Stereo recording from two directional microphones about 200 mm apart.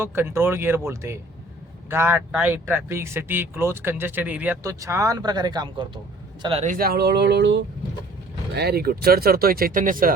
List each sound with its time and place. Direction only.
0.0 s speech: 10° right (ahead or behind); by 6.7 s 30° right (ahead or behind)
6.7 s speech: 50° right (ahead or behind)